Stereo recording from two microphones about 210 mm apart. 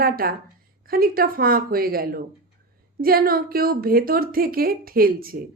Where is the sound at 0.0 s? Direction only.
45° right (ahead or behind).